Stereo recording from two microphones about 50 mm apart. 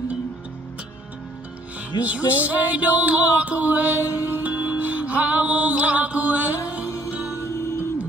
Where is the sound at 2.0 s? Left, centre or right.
Right.